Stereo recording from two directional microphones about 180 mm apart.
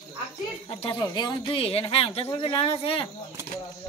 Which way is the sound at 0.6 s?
25° left (ahead or behind).